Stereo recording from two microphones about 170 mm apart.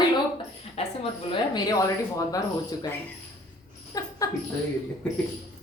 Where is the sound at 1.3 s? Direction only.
25° left (ahead or behind).